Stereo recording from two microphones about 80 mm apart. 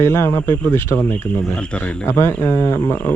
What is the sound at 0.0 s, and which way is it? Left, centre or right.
Speech, left.